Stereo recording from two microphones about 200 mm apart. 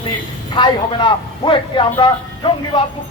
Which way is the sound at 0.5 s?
25° left (ahead or behind).